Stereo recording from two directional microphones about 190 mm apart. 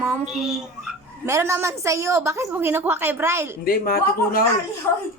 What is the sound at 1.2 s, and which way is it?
A woman's voice, 15° right (ahead or behind).